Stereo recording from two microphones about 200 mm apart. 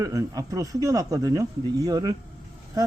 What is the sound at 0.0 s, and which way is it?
Speech, 15° right (ahead or behind).